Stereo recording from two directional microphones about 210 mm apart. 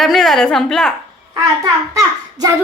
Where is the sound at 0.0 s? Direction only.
Centre (ahead or behind).